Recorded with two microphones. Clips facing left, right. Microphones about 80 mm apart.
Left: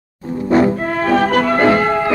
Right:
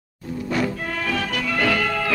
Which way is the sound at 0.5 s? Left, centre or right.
Left.